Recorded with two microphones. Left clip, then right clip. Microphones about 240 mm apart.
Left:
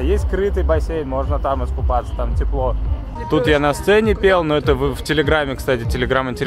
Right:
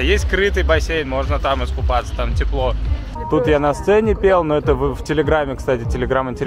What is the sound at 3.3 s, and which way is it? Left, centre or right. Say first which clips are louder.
A man's voice: even; left.